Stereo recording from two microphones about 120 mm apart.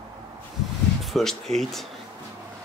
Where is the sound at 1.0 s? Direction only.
Centre (ahead or behind).